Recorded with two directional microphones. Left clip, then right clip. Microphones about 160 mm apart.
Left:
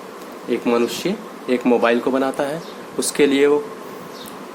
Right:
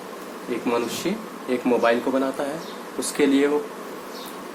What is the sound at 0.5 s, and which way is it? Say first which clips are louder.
Speech: left 6 dB; 70° left (ahead or behind).